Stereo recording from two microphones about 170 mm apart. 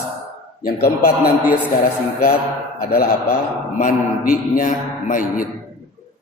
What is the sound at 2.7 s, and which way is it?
A man's voice, 60° left (ahead or behind).